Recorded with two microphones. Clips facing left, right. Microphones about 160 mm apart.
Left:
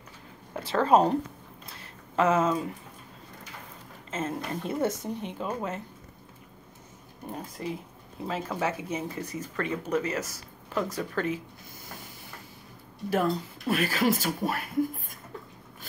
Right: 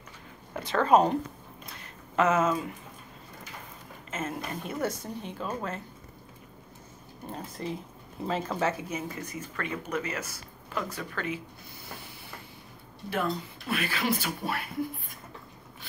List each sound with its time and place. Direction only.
0.6 s speech: 5° left (ahead or behind)
1.7 s a sound: 30° left (ahead or behind)
4.1 s speech: 30° left (ahead or behind)
7.2 s speech: 10° left (ahead or behind)
8.8 s speech: 30° left (ahead or behind)
13.1 s speech: 40° left (ahead or behind)